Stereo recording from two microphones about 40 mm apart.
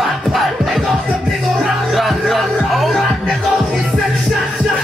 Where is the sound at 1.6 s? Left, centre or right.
Centre.